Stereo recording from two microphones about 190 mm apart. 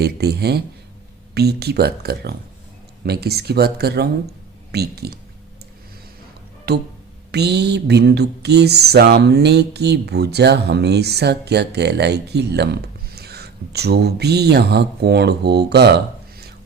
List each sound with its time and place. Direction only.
0.0 s speech: 55° right (ahead or behind)
6.7 s speech: 60° right (ahead or behind)